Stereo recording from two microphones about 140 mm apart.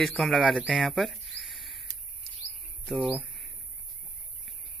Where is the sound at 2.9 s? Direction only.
10° right (ahead or behind).